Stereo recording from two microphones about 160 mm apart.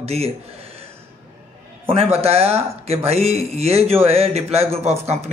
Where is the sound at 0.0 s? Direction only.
40° right (ahead or behind).